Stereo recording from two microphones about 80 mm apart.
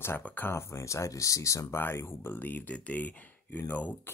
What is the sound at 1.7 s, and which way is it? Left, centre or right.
Speech, left.